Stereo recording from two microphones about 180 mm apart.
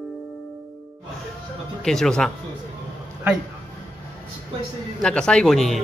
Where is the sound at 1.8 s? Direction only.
5° left (ahead or behind).